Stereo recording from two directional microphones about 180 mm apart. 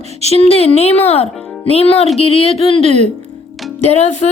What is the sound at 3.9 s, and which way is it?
Speech, 40° left (ahead or behind).